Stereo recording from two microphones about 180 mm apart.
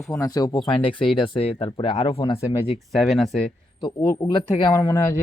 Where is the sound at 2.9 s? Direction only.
Centre (ahead or behind).